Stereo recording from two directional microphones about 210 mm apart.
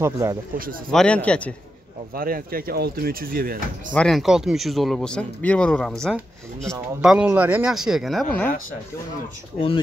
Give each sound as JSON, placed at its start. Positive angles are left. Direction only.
{"t": 0.0, "sound": "speech", "side_deg": -10}
{"t": 0.9, "sound": "speech", "side_deg": 5}
{"t": 2.1, "sound": "speech", "side_deg": -45}
{"t": 3.9, "sound": "speech", "side_deg": 5}